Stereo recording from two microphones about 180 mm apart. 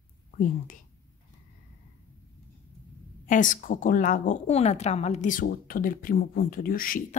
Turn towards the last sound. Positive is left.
turn(degrees=50)  # may be behind; listen again after turning